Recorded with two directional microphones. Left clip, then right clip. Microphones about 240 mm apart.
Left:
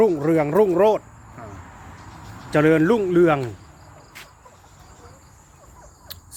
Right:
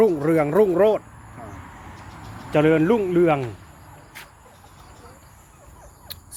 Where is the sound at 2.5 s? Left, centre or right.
Centre.